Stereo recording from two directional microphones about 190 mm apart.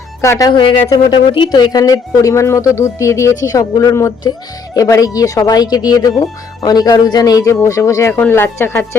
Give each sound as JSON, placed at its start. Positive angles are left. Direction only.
{"t": 0.2, "sound": "speech", "side_deg": 15}